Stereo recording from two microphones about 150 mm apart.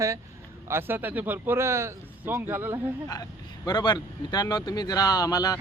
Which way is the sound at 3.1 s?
25° left (ahead or behind).